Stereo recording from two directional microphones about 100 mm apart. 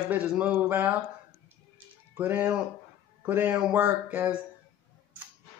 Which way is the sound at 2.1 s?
20° right (ahead or behind).